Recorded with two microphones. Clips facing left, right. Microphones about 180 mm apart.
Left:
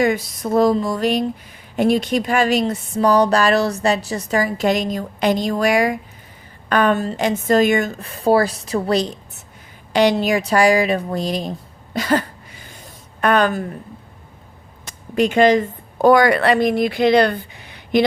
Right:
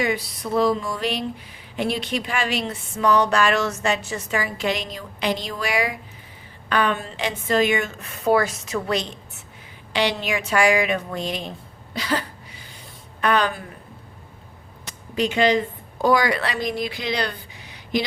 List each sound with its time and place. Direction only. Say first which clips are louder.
0.0 s a woman's voice: left 6 dB; 45° left (ahead or behind)
11.9 s a sound: left 7 dB; 50° left (ahead or behind)
13.2 s speech: left 5 dB; 50° left (ahead or behind)
14.8 s a woman's voice: left 6 dB; 50° left (ahead or behind)